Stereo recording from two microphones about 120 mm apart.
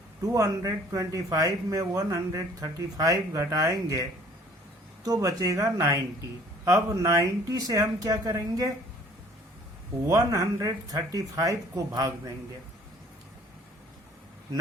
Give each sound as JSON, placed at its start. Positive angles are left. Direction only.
{"t": 0.2, "sound": "speech", "side_deg": -25}
{"t": 5.0, "sound": "speech", "side_deg": -30}
{"t": 10.1, "sound": "speech", "side_deg": -25}